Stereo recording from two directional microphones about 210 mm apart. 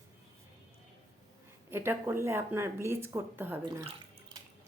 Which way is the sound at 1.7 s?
10° right (ahead or behind).